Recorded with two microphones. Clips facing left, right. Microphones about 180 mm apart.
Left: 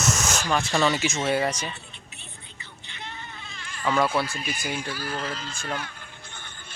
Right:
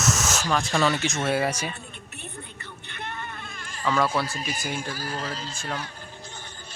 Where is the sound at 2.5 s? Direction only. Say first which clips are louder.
Right 4 dB; 55° right (ahead or behind).